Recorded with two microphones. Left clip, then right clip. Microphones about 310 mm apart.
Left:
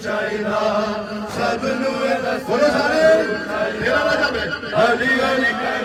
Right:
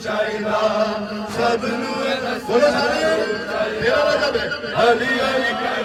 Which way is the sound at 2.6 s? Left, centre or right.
Centre.